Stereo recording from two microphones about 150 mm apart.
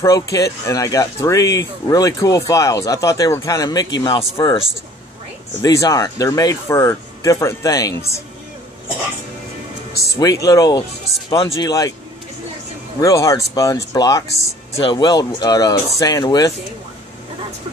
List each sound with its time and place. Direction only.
0.0 s speech: 20° left (ahead or behind)
5.6 s speech: 20° left (ahead or behind)
10.1 s speech: 25° left (ahead or behind)
13.0 s speech: 20° left (ahead or behind)